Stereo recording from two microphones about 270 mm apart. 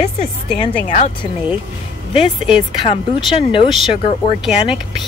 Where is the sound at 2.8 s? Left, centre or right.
Centre.